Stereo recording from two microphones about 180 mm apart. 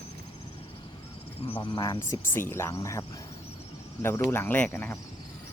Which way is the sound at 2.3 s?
10° left (ahead or behind).